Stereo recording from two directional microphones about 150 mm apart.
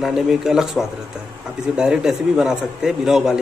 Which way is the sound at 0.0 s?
5° right (ahead or behind).